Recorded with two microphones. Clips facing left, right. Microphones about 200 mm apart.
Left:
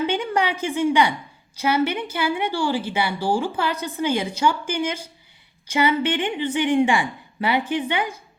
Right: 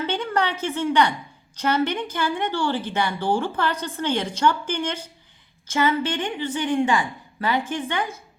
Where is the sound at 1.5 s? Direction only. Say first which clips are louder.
Left 1 dB; 10° left (ahead or behind).